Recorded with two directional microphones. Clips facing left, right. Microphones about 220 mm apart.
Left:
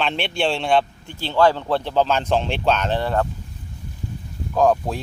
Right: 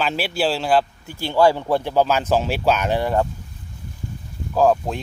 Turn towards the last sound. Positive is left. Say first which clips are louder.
# right 1 dB
turn(degrees=0)  # may be behind; listen again after turning